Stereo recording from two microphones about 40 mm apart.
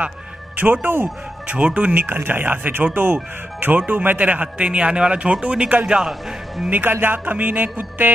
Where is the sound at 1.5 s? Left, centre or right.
Right.